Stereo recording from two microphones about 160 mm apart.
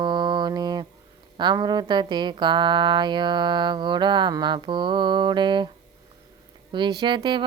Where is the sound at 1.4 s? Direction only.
25° right (ahead or behind).